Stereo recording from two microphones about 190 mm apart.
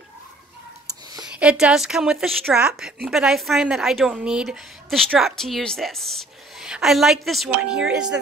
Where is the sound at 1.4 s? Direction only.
5° right (ahead or behind).